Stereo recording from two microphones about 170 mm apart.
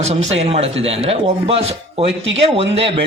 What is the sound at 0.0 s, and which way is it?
A man's voice, 40° right (ahead or behind).